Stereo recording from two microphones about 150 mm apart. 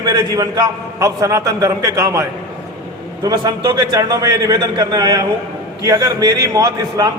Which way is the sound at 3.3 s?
25° right (ahead or behind).